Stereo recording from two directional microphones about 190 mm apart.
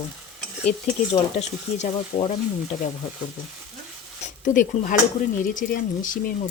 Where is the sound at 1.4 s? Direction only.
35° left (ahead or behind).